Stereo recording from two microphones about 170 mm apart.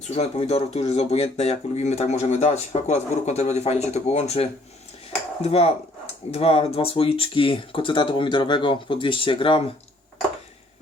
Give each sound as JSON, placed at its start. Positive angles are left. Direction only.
{"t": 0.1, "sound": "speech", "side_deg": 40}